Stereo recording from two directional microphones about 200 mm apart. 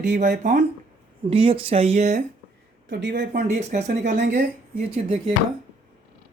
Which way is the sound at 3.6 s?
35° right (ahead or behind).